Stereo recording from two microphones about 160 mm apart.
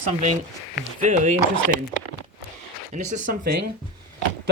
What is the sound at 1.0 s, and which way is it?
Speech, 50° right (ahead or behind).